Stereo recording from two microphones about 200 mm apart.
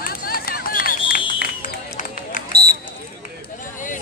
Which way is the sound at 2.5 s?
55° right (ahead or behind).